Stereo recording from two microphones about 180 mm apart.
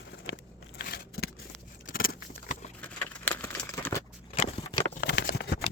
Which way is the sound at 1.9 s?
55° left (ahead or behind).